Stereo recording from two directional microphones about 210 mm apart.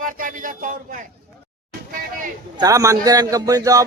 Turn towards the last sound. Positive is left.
turn(degrees=-15)  # may be behind; listen again after turning